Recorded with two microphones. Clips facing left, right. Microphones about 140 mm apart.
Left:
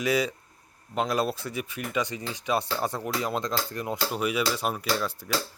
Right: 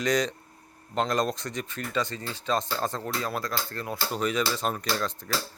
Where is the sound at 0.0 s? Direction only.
5° left (ahead or behind).